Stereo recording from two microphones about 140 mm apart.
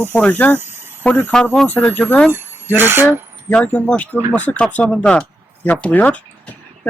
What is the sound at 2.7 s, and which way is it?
Speech, 15° right (ahead or behind).